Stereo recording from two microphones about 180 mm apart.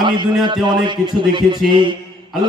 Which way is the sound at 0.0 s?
25° right (ahead or behind).